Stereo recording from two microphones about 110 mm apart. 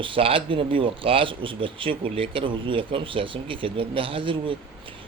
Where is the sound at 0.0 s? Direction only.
55° right (ahead or behind).